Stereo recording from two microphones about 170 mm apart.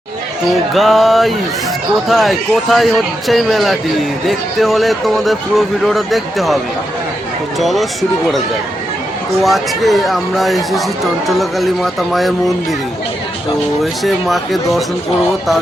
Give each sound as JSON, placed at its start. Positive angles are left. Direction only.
{"t": 0.7, "sound": "speech", "side_deg": 0}
{"t": 7.6, "sound": "speech", "side_deg": 0}
{"t": 9.4, "sound": "speech", "side_deg": 0}
{"t": 14.0, "sound": "speech", "side_deg": 0}